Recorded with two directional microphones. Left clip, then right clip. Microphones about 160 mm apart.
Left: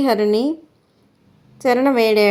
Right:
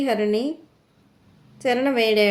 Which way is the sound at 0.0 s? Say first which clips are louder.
Left 5 dB; 35° left (ahead or behind).